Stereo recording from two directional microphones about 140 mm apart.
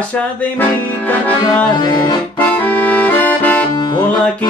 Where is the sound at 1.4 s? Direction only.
30° left (ahead or behind).